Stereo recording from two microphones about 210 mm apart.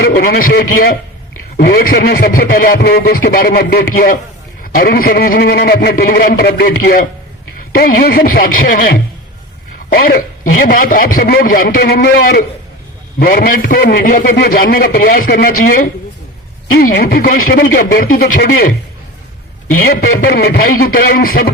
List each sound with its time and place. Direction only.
0.0 s a man's voice: 45° left (ahead or behind)
19.8 s a man's voice: 50° left (ahead or behind)